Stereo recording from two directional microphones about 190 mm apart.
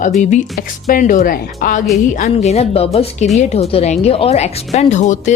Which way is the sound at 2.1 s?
35° left (ahead or behind).